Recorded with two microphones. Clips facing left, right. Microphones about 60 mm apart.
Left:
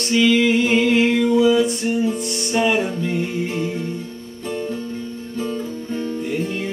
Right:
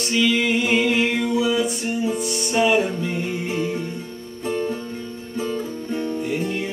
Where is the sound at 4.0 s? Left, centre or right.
Centre.